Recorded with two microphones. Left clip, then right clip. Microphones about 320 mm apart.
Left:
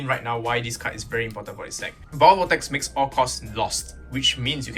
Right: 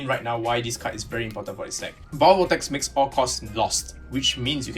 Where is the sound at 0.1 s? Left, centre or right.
Centre.